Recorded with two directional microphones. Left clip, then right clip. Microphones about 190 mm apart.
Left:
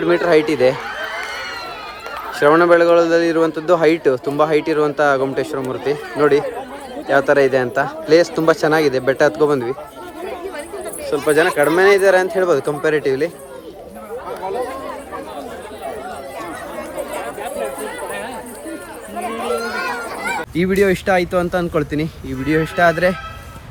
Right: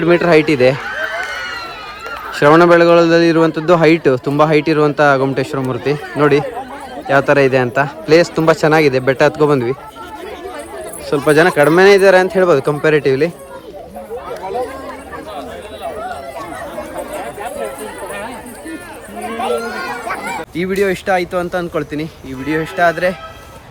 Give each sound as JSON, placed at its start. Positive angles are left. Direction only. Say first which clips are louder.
{"t": 0.0, "sound": "a man's voice", "louder": "right 3 dB", "side_deg": 10}
{"t": 0.9, "sound": "a sound", "louder": "right 4 dB", "side_deg": 50}
{"t": 2.3, "sound": "a man's voice", "louder": "right 3 dB", "side_deg": 10}
{"t": 11.1, "sound": "a man's voice", "louder": "right 4 dB", "side_deg": 5}
{"t": 20.6, "sound": "speech", "louder": "even", "side_deg": 0}